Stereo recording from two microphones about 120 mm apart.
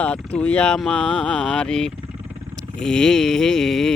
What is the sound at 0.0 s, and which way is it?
Speech, 10° left (ahead or behind).